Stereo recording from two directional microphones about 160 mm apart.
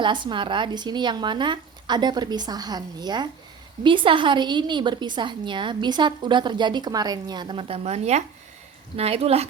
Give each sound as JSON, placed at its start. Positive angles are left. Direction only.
{"t": 0.0, "sound": "a woman's voice", "side_deg": -30}